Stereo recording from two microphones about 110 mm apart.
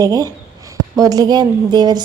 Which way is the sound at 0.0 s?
35° right (ahead or behind).